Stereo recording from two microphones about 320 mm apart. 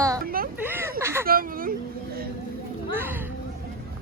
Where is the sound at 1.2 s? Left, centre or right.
Right.